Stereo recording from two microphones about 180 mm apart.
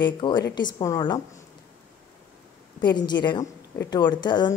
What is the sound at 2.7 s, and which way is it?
A woman's voice, 25° left (ahead or behind).